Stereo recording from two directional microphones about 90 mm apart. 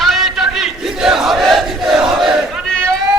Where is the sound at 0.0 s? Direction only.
Centre (ahead or behind).